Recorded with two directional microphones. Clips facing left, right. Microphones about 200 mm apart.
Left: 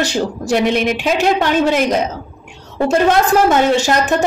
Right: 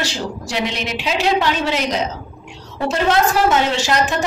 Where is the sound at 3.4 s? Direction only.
50° left (ahead or behind).